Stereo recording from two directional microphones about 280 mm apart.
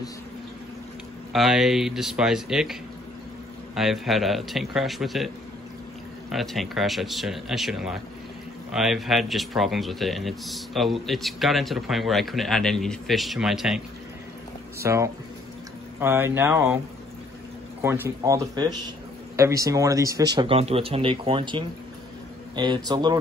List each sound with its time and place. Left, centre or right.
1.3 s speech: centre
6.3 s speech: centre
17.8 s speech: centre